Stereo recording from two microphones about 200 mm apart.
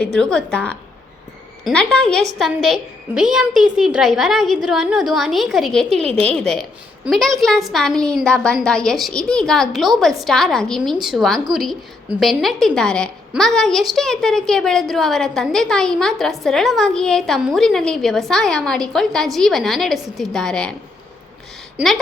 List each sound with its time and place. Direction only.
0.0 s a woman's voice: 5° left (ahead or behind)